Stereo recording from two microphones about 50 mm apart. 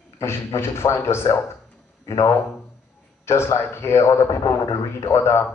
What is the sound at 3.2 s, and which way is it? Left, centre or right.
A man's voice, left.